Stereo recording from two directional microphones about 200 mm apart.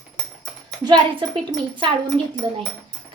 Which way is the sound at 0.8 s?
20° right (ahead or behind).